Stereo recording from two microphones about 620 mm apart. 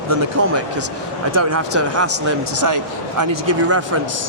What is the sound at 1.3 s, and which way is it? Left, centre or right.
Speech, right.